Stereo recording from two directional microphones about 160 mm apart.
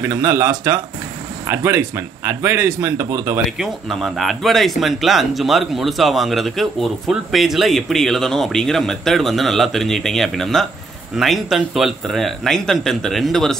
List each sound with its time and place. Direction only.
0.0 s speech: 15° right (ahead or behind)
3.4 s speech: centre (ahead or behind)